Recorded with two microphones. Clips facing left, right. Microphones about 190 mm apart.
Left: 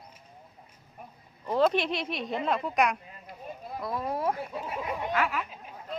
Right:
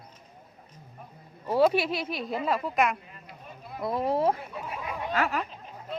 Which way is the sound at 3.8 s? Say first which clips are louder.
Right 5 dB; 25° right (ahead or behind).